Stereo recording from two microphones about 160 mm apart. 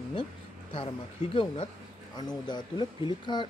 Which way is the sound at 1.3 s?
35° left (ahead or behind).